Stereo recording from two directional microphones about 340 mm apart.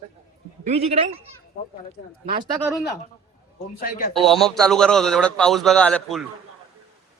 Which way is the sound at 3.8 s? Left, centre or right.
Left.